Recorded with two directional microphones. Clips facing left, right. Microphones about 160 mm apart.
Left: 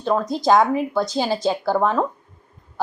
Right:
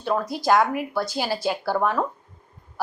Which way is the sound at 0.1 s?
20° left (ahead or behind).